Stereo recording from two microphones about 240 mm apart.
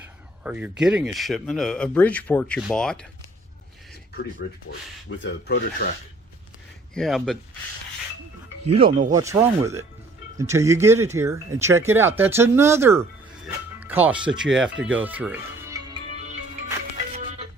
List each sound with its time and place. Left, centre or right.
0.0 s speech: centre
5.0 s speech: left
6.9 s speech: centre
8.6 s speech: right
9.1 s speech: centre
13.7 s music: centre; by 16.6 s right